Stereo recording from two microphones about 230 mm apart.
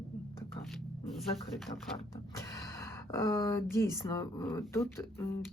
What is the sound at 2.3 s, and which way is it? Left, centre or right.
Speech, centre.